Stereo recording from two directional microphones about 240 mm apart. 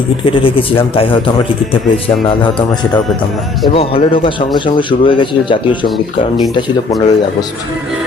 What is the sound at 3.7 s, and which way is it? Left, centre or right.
Speech, left.